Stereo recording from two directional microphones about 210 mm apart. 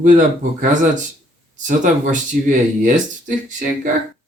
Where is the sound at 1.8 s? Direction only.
40° right (ahead or behind).